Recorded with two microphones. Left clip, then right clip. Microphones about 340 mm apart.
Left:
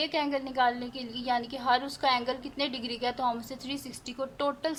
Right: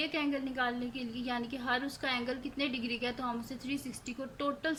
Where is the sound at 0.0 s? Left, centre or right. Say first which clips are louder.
Left 5 dB; centre.